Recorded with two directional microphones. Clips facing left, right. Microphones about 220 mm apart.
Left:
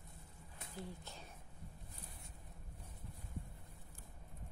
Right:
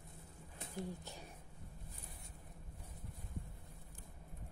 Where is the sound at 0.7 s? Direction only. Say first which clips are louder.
Right 4 dB; 15° right (ahead or behind).